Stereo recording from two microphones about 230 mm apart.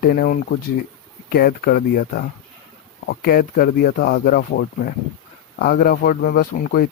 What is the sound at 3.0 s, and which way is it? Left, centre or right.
Speech, left.